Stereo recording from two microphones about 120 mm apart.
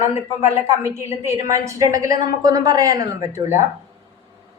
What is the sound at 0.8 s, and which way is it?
A woman's voice, 25° right (ahead or behind).